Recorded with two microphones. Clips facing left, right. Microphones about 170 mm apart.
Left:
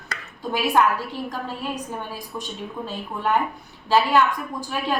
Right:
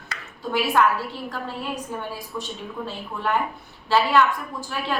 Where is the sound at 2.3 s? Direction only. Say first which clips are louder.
Even; 20° left (ahead or behind).